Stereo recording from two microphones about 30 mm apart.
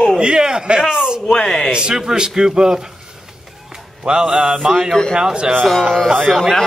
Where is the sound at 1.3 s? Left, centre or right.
Left.